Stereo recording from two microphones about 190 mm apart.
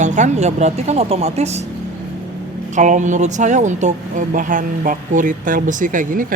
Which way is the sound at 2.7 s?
40° right (ahead or behind).